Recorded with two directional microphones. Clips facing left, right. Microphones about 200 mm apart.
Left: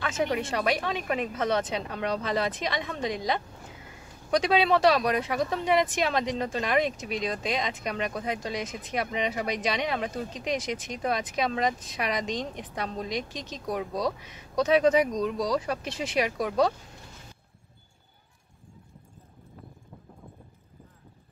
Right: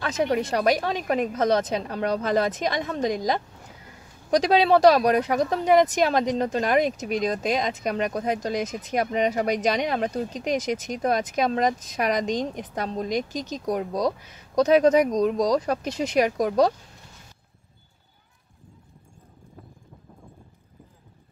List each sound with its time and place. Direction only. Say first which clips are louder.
0.0 s a woman's voice: right 4 dB; 40° right (ahead or behind)